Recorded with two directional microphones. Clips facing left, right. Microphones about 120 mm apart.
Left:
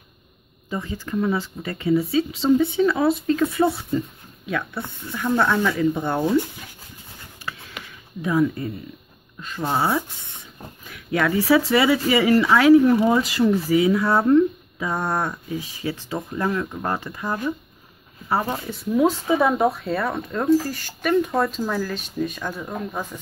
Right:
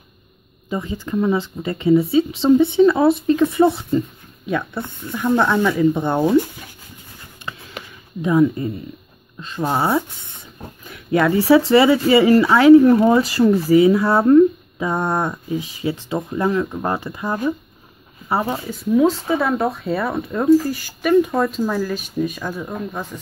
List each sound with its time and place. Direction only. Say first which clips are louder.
0.7 s speech: right 4 dB; 20° right (ahead or behind)
7.8 s a sound: right 4 dB; 35° right (ahead or behind)
8.2 s speech: right 5 dB; 25° right (ahead or behind)
12.8 s speech: right 4 dB; 40° right (ahead or behind)
14.8 s speech: right 4 dB; 20° right (ahead or behind)
18.5 s speech: right 5 dB; centre (ahead or behind)
19.3 s speech: even; 15° left (ahead or behind)
19.8 s speech: right 3 dB; 5° right (ahead or behind)